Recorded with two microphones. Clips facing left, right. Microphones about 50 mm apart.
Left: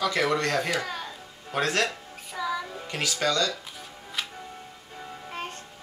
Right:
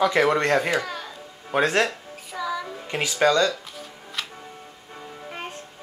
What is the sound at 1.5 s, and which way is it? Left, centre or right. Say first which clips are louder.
Speech: right 5 dB; right.